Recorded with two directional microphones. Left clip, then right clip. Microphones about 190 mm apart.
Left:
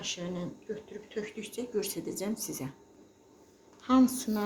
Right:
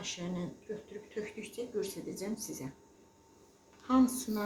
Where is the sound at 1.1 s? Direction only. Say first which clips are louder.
Left 3 dB; 50° left (ahead or behind).